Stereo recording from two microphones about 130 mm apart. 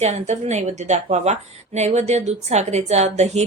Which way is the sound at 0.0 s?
60° right (ahead or behind).